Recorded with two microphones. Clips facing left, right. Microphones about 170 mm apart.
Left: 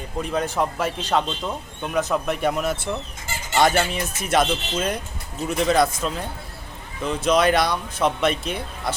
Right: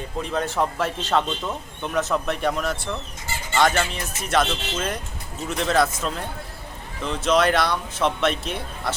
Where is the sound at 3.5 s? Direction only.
20° left (ahead or behind).